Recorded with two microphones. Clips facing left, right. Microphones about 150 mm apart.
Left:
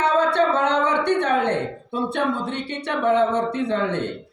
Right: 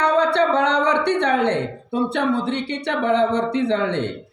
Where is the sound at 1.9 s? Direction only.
70° right (ahead or behind).